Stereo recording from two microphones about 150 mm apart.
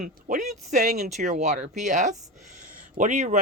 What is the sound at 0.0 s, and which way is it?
A woman's voice, 55° right (ahead or behind).